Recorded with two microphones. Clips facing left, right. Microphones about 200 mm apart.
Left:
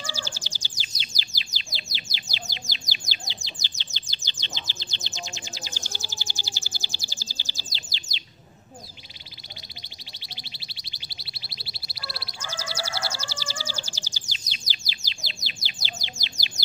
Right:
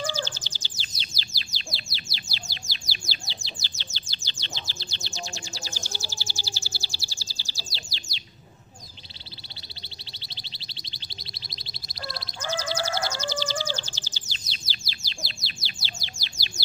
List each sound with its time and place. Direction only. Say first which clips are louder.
0.0 s bird: right 6 dB; 10° left (ahead or behind)
10.2 s a sound: left 2 dB; 10° left (ahead or behind)
14.9 s bird: right 5 dB; 15° left (ahead or behind)